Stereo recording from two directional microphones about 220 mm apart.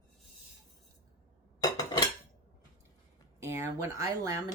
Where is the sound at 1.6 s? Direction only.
15° left (ahead or behind).